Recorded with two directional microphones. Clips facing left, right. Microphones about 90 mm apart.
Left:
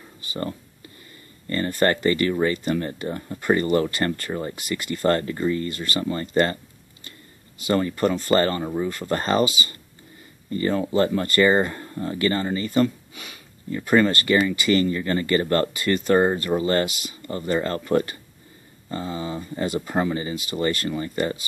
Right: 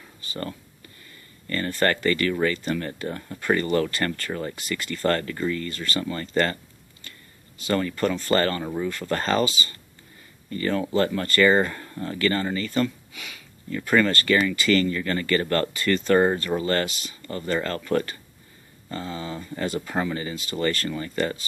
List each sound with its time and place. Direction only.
0.3 s speech: 20° left (ahead or behind)
1.7 s speech: 15° left (ahead or behind)
4.6 s speech: 10° left (ahead or behind)
5.0 s speech: 25° left (ahead or behind)
5.7 s speech: 15° left (ahead or behind)
5.9 s speech: 25° left (ahead or behind)
7.7 s speech: 20° left (ahead or behind)
10.5 s speech: 25° left (ahead or behind)
13.1 s a sound: 35° left (ahead or behind)
13.8 s speech: 25° left (ahead or behind)